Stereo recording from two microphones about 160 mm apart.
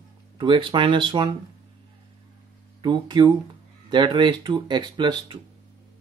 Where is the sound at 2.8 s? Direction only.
30° right (ahead or behind).